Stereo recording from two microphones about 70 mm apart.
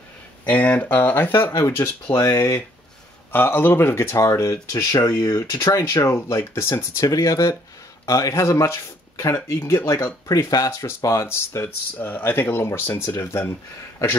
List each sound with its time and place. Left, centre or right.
0.5 s speech: left
7.0 s speech: left
10.2 s speech: left
11.1 s speech: left